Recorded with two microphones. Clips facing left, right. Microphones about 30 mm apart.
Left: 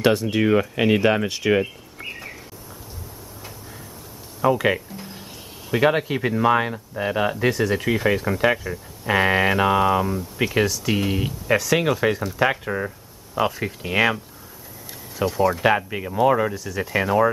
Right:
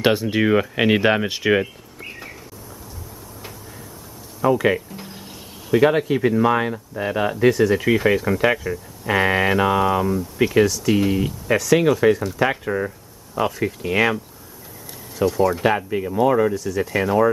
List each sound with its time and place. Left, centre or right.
0.0 s speech: centre
4.4 s speech: centre